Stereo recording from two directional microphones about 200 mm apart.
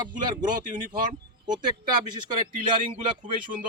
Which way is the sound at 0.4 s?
40° right (ahead or behind).